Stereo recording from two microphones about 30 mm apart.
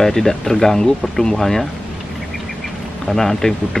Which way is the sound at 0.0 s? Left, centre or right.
Centre.